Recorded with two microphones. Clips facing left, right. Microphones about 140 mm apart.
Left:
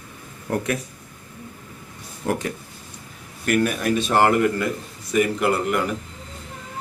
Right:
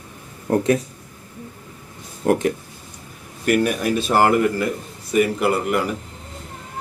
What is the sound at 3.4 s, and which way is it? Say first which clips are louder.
A man's voice: right 2 dB; 10° right (ahead or behind).